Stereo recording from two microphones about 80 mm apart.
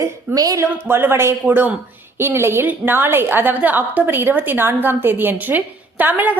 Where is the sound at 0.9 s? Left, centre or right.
Right.